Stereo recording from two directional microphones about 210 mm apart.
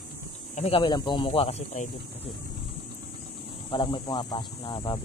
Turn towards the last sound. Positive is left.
turn(degrees=20)  # may be behind; listen again after turning